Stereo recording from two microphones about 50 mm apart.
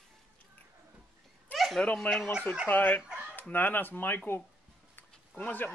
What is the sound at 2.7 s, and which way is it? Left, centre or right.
Speech, left.